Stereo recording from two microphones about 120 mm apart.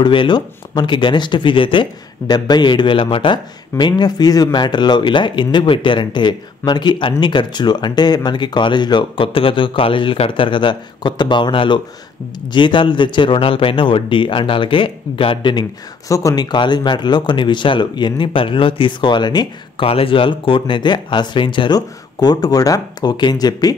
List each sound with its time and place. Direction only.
0.0 s speech: 40° left (ahead or behind)
16.1 s speech: 30° left (ahead or behind)
19.9 s speech: 50° left (ahead or behind); by 23.8 s 30° left (ahead or behind)